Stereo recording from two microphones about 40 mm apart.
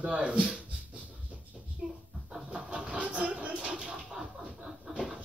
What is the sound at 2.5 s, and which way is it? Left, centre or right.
Vehicle, right.